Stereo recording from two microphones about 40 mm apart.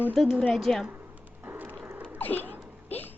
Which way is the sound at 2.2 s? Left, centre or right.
Left.